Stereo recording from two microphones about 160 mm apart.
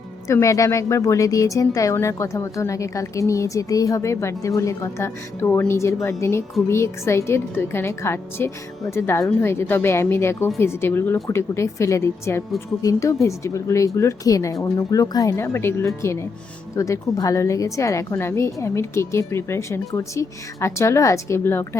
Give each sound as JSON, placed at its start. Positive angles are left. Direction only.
{"t": 0.3, "sound": "a woman's voice", "side_deg": 20}